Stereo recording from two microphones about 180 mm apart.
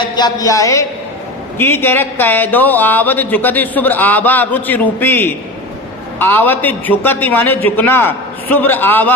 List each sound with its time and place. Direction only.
0.2 s speech: 20° left (ahead or behind)